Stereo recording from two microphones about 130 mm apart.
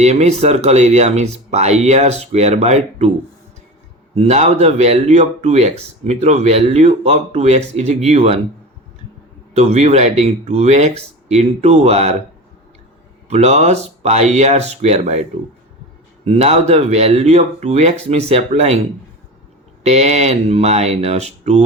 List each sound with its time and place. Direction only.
0.0 s a man's voice: 60° right (ahead or behind)
4.1 s a man's voice: 55° right (ahead or behind)
9.6 s a man's voice: 55° right (ahead or behind)
13.2 s a man's voice: 55° right (ahead or behind)